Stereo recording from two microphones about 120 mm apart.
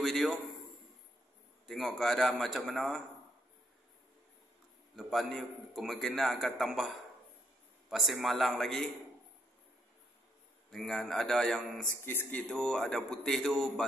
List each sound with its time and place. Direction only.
0.0 s a man's voice: centre (ahead or behind)
1.7 s a man's voice: centre (ahead or behind)
4.9 s a man's voice: centre (ahead or behind)
7.9 s a man's voice: centre (ahead or behind)
10.7 s a man's voice: centre (ahead or behind)
12.0 s speech: 20° left (ahead or behind)
12.4 s a man's voice: 5° left (ahead or behind)